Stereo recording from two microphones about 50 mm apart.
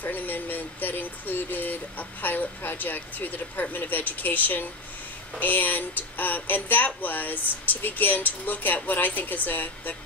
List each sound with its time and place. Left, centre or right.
0.0 s speech: left